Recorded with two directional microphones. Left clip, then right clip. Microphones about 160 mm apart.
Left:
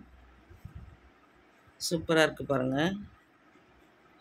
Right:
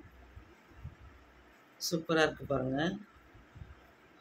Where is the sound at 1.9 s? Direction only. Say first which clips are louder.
Left 4 dB; 45° left (ahead or behind).